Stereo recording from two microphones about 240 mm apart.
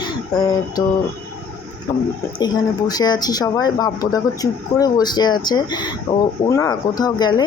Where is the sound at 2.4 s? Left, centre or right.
Centre.